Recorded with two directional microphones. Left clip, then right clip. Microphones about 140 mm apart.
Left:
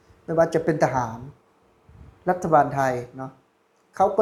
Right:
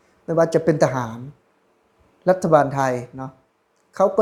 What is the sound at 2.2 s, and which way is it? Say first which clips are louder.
Speech: right 3 dB; 50° right (ahead or behind).